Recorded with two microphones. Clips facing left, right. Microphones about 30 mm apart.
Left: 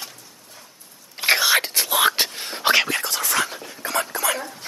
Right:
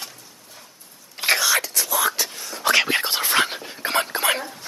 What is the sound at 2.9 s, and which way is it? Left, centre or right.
Dog, right.